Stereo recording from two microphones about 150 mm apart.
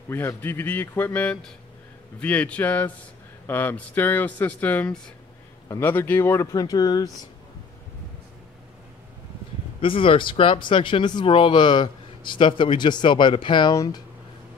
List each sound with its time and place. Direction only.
0.1 s speech: 15° left (ahead or behind)
9.8 s speech: 35° left (ahead or behind)